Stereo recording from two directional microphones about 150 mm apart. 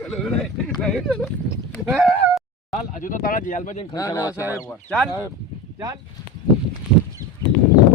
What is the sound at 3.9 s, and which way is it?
Speech, 20° left (ahead or behind).